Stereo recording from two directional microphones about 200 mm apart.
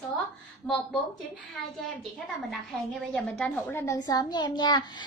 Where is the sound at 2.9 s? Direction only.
5° left (ahead or behind).